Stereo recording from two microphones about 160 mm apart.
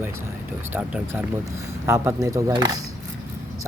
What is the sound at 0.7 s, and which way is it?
Speech, 10° right (ahead or behind).